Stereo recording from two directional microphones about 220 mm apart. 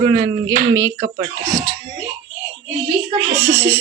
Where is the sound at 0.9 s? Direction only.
55° right (ahead or behind).